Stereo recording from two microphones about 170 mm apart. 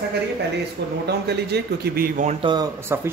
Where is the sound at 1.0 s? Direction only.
75° right (ahead or behind).